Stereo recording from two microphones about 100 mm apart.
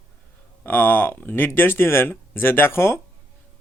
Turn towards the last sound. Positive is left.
turn(degrees=25)  # may be behind; listen again after turning